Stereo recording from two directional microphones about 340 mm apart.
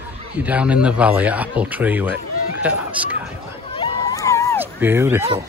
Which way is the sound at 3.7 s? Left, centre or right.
Centre.